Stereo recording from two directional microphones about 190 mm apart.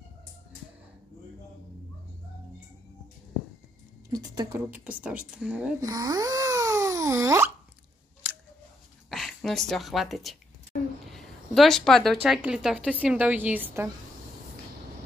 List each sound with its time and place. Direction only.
4.1 s speech: 20° right (ahead or behind)
4.6 s speech: 10° right (ahead or behind)
5.8 s a sound: 20° right (ahead or behind)
9.1 s speech: centre (ahead or behind)
10.7 s a sound: 50° left (ahead or behind)
11.1 s speech: centre (ahead or behind)